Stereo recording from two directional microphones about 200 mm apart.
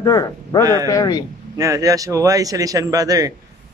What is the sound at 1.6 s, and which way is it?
A man's voice, 15° right (ahead or behind).